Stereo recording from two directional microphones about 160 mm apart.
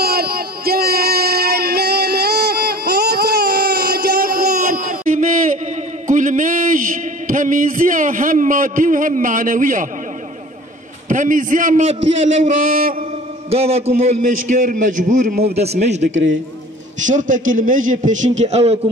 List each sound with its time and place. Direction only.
0.0 s a sound: 70° right (ahead or behind); by 6.8 s 55° right (ahead or behind)
7.2 s a man's voice: 55° right (ahead or behind)
11.1 s a man's voice: 55° right (ahead or behind)
11.8 s a man's voice: 40° right (ahead or behind)
12.6 s a man's voice: 60° right (ahead or behind)
13.5 s a man's voice: 40° right (ahead or behind)
15.4 s a man's voice: 40° right (ahead or behind)
17.0 s a man's voice: 55° right (ahead or behind)